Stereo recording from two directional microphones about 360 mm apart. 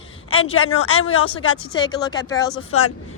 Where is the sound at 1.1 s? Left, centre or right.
Centre.